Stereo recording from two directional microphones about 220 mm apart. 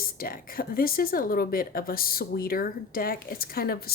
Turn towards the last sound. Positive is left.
turn(degrees=45)  # may be behind; listen again after turning